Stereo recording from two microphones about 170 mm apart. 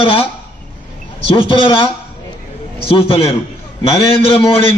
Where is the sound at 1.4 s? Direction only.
30° left (ahead or behind).